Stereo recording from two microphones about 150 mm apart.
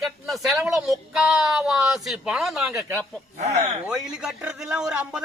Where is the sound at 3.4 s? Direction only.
50° right (ahead or behind).